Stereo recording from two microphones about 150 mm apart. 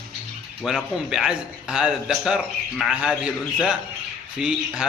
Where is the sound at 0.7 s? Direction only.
5° right (ahead or behind).